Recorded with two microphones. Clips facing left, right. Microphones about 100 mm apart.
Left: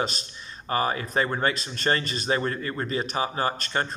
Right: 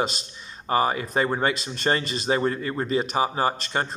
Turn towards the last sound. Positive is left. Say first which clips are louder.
# right 2 dB
turn(degrees=-20)  # may be behind; listen again after turning